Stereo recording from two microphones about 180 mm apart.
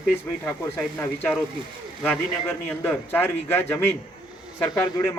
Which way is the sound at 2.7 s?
10° left (ahead or behind).